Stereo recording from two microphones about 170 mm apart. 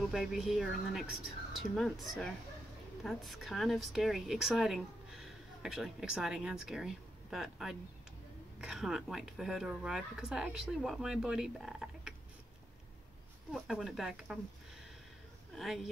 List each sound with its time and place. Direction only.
0.1 s speech: centre (ahead or behind)
13.5 s speech: centre (ahead or behind)
15.5 s speech: centre (ahead or behind)